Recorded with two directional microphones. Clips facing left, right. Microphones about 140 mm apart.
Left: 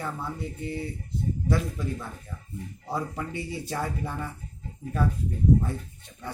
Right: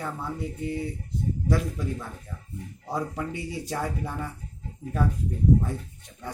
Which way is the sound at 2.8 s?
5° right (ahead or behind).